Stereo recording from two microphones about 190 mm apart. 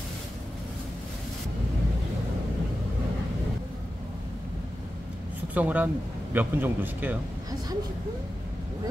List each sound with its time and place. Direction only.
5.5 s speech: 10° right (ahead or behind)